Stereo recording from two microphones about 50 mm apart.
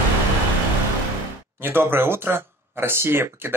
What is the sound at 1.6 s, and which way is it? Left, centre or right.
Speech, right.